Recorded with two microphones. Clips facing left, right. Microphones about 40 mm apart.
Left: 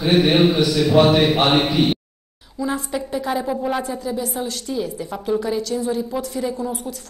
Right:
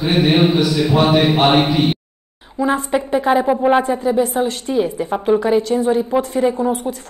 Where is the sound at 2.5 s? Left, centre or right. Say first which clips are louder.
Right 7 dB; right.